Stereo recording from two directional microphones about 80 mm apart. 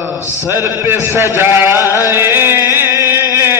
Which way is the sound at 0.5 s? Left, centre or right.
Right.